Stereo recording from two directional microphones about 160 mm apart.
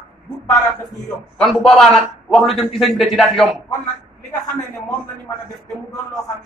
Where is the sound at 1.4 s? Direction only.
Centre (ahead or behind).